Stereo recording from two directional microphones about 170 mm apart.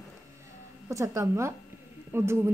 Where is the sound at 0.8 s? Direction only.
20° right (ahead or behind).